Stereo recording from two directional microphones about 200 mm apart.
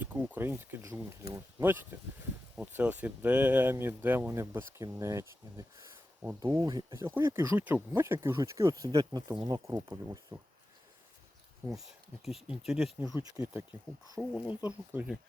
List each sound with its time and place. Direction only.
0.0 s speech: 10° right (ahead or behind)
11.7 s speech: centre (ahead or behind)
13.0 s speech: 15° right (ahead or behind)